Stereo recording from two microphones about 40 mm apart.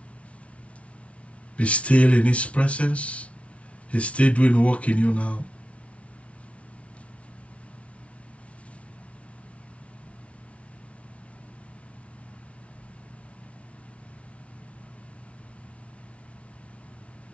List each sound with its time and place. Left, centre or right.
1.6 s speech: left